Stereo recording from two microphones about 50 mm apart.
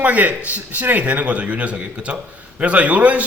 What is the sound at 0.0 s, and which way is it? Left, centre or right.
A man's voice, right.